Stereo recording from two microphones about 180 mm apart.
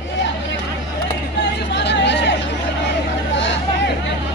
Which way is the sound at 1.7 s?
75° left (ahead or behind).